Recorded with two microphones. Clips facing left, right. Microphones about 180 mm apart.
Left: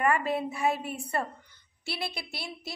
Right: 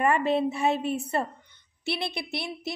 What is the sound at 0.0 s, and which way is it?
A woman's voice, 25° right (ahead or behind).